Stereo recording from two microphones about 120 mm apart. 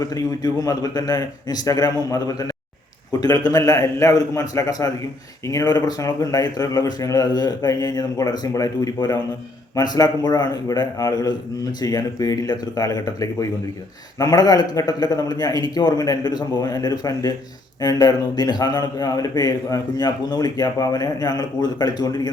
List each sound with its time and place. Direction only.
0.0 s a man's voice: 30° left (ahead or behind)